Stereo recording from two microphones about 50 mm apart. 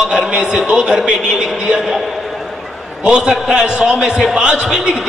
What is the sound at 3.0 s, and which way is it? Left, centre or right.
A man's voice, centre.